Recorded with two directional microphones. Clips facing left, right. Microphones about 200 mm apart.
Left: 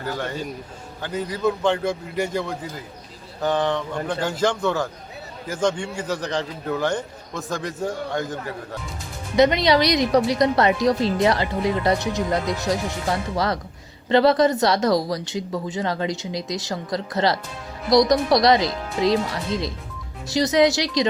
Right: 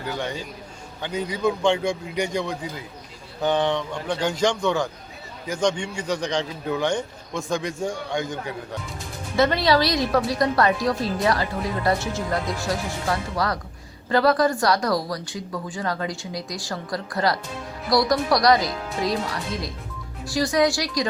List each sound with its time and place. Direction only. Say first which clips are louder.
1.0 s a man's voice: left 1 dB; 5° left (ahead or behind)
9.3 s speech: left 3 dB; 20° left (ahead or behind)